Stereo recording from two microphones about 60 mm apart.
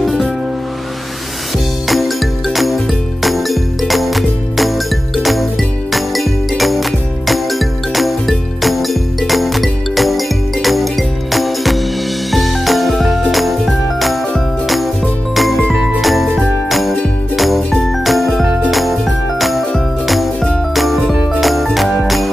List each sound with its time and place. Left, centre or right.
0.0 s music: centre
1.9 s music: centre
12.3 s jingle: centre
15.3 s music: centre
15.7 s jingle bell: centre
17.4 s music: centre
18.0 s jingle: centre
18.7 s music: centre